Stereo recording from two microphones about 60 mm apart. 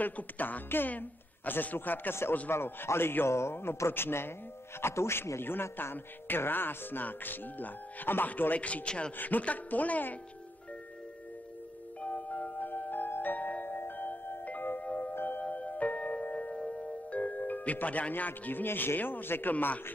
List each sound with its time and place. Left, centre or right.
0.0 s speech: left
2.5 s a man's voice: left
12.0 s music: left
14.8 s glockenspiel: left
15.1 s music: left
15.4 s music: left
19.5 s speech: left